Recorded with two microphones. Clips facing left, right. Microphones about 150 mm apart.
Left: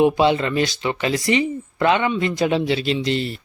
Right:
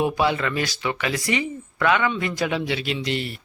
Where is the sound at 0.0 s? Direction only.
25° left (ahead or behind).